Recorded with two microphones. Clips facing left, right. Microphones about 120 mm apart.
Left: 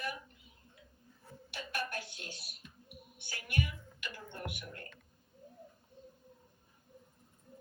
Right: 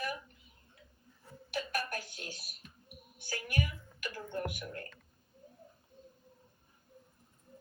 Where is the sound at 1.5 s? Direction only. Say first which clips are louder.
Right 4 dB; 45° right (ahead or behind).